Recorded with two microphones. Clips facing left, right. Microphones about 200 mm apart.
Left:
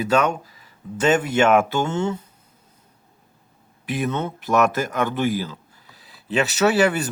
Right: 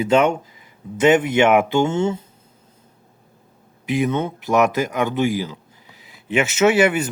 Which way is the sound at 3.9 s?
20° right (ahead or behind).